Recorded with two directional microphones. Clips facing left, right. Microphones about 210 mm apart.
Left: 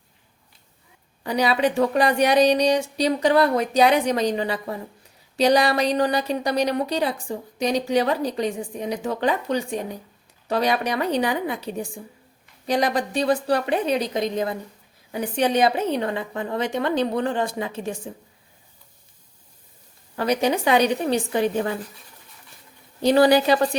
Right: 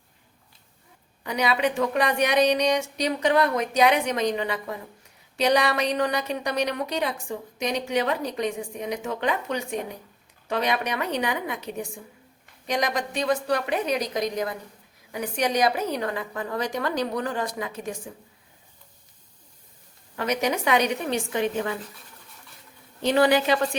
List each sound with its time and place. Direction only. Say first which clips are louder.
1.2 s a woman's voice: left 3 dB; 35° left (ahead or behind)
20.1 s a woman's voice: left 4 dB; 30° left (ahead or behind)
23.0 s a woman's voice: left 4 dB; 35° left (ahead or behind)